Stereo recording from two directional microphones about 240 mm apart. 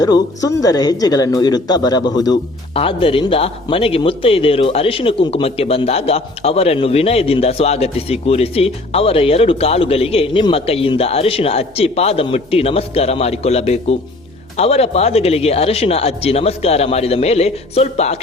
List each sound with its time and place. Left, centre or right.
0.0 s speech: centre